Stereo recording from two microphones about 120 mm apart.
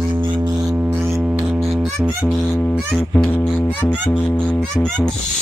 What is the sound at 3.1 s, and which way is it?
Speech, 15° left (ahead or behind).